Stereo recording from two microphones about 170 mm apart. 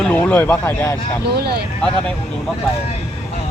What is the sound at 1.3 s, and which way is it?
Speech, 70° right (ahead or behind).